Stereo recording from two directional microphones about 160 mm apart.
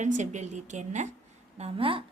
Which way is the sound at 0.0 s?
50° right (ahead or behind).